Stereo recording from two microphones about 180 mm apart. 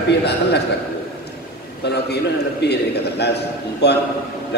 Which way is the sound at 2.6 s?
70° left (ahead or behind).